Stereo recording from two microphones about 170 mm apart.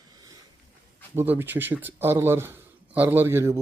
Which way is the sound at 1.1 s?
10° right (ahead or behind).